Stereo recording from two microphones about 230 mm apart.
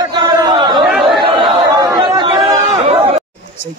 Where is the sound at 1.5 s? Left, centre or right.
Centre.